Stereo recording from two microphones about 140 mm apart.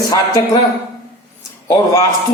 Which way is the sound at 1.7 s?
20° left (ahead or behind).